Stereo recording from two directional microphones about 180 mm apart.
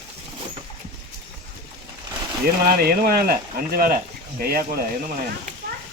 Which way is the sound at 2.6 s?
55° right (ahead or behind).